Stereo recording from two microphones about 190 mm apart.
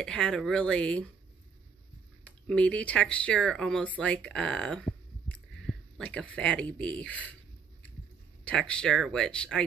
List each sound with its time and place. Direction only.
0.0 s speech: 5° left (ahead or behind)
2.4 s speech: 5° left (ahead or behind)
8.5 s speech: 5° left (ahead or behind)